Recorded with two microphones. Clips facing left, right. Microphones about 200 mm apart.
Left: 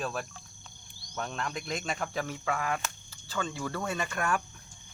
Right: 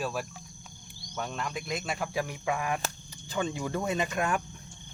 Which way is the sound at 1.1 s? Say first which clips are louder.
Right 1 dB; 5° right (ahead or behind).